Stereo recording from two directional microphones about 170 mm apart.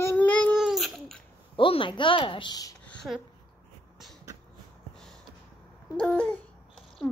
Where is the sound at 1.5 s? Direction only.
30° left (ahead or behind).